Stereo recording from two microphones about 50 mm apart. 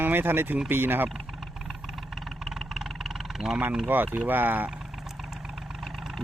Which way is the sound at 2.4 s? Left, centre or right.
Centre.